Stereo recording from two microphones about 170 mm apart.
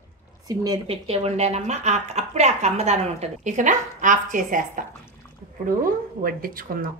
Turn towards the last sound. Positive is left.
turn(degrees=-55)  # may be behind; listen again after turning